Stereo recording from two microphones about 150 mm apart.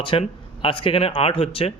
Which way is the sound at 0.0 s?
35° left (ahead or behind).